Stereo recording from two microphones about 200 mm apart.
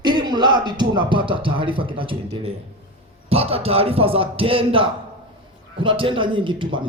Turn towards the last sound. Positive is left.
turn(degrees=-25)  # may be behind; listen again after turning